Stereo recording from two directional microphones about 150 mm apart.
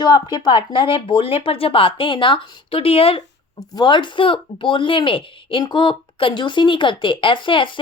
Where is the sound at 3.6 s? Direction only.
25° left (ahead or behind).